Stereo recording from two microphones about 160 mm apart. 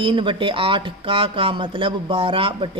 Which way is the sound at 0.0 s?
30° right (ahead or behind).